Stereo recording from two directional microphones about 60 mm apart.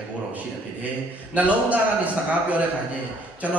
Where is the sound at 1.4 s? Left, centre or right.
Right.